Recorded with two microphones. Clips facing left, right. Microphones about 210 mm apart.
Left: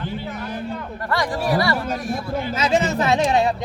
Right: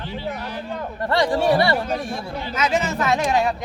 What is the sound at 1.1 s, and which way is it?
Speech, 25° right (ahead or behind).